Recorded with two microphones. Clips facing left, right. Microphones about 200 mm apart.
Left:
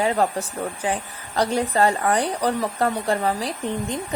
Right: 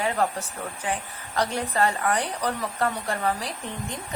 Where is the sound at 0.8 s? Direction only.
35° left (ahead or behind).